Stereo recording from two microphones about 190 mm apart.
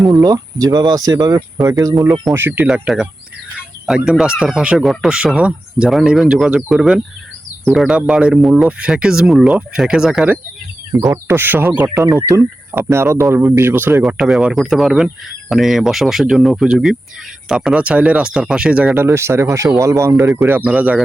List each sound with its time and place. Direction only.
0.0 s speech: 20° right (ahead or behind)
14.0 s speech: centre (ahead or behind)